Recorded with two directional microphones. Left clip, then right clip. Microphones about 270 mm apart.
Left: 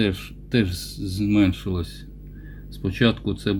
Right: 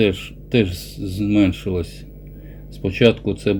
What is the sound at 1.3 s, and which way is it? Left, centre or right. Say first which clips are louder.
Speech: right 4 dB; left.